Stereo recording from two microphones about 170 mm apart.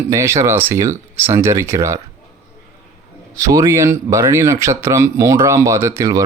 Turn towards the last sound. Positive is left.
turn(degrees=-15)  # may be behind; listen again after turning